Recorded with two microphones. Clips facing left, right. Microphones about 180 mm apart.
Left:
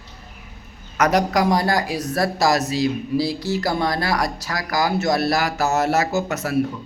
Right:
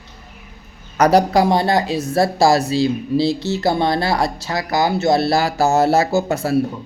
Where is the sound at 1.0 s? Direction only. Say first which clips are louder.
Right 5 dB; 30° right (ahead or behind).